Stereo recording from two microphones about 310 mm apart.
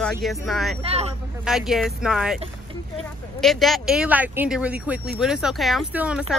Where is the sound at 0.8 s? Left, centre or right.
Centre.